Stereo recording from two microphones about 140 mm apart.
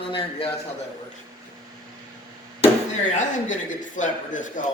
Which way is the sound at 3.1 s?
65° left (ahead or behind).